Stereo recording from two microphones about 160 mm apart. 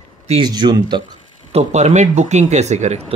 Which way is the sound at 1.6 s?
45° right (ahead or behind).